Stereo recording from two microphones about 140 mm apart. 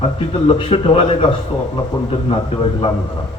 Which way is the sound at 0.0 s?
45° left (ahead or behind).